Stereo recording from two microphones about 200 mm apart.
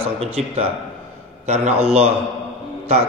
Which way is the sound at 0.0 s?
30° right (ahead or behind).